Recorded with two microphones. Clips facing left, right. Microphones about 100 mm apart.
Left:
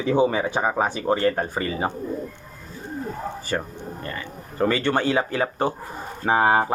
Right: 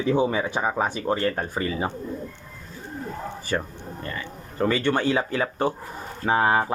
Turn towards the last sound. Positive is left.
turn(degrees=25)  # may be behind; listen again after turning